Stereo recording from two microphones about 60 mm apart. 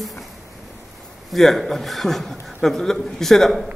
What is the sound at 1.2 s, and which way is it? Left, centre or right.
A man's voice, centre.